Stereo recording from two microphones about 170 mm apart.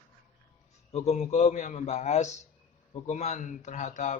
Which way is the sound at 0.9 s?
40° left (ahead or behind).